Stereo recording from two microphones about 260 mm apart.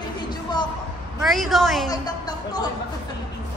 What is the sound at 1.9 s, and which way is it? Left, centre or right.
Speech, centre.